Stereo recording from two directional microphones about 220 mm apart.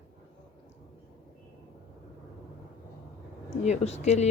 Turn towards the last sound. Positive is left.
turn(degrees=30)  # may be behind; listen again after turning